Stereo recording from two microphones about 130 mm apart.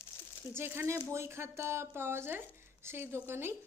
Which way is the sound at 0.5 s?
20° right (ahead or behind).